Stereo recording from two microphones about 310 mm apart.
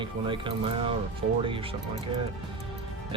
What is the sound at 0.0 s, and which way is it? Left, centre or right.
Speech, centre.